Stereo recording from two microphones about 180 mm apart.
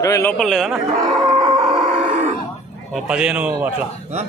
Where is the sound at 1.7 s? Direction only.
40° right (ahead or behind).